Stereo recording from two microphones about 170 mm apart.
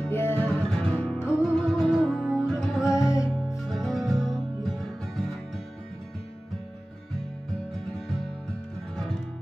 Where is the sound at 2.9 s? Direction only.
20° left (ahead or behind).